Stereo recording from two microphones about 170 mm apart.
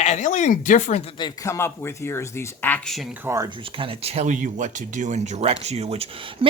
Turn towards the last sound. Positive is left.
turn(degrees=-30)  # may be behind; listen again after turning